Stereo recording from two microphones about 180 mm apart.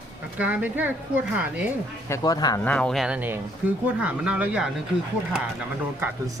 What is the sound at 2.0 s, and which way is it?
Speech, 20° left (ahead or behind).